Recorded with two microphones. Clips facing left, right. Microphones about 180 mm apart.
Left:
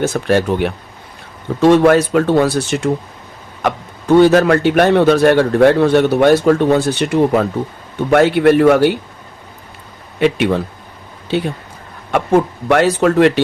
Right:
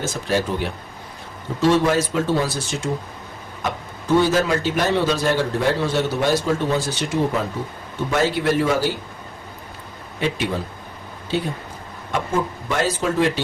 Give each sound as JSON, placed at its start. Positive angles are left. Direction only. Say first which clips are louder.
{"t": 0.0, "sound": "speech", "louder": "left 8 dB", "side_deg": 65}
{"t": 10.2, "sound": "speech", "louder": "left 9 dB", "side_deg": 65}